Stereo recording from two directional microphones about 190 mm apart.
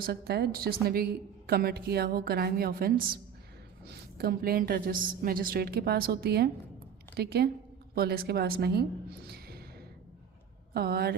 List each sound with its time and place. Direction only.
0.0 s a woman's voice: 55° right (ahead or behind)
10.8 s a woman's voice: 55° right (ahead or behind)